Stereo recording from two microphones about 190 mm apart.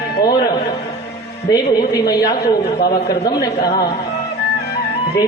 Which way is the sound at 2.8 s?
55° left (ahead or behind).